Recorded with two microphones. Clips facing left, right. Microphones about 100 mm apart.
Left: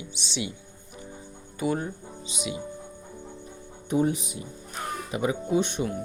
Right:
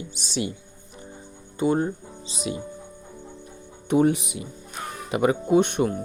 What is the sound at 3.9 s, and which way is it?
Speech, 65° right (ahead or behind).